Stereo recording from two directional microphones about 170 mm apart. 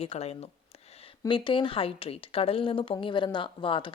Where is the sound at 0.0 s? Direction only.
35° left (ahead or behind).